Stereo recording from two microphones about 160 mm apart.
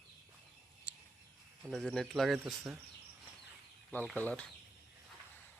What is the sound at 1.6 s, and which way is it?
Speech, centre (ahead or behind).